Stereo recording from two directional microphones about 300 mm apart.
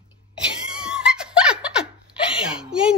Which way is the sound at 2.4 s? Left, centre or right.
Centre.